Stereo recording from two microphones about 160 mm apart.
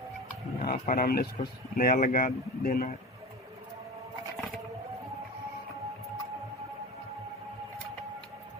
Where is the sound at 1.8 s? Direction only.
65° left (ahead or behind).